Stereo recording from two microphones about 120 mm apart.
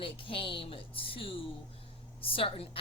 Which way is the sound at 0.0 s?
45° left (ahead or behind).